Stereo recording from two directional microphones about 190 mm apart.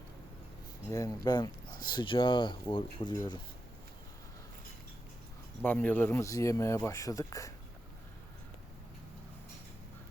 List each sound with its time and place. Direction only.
0.9 s speech: 15° left (ahead or behind)
5.6 s speech: 10° left (ahead or behind)